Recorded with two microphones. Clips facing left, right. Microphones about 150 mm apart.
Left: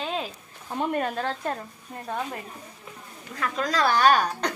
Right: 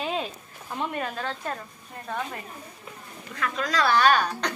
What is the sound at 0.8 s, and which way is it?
Speech, 45° left (ahead or behind).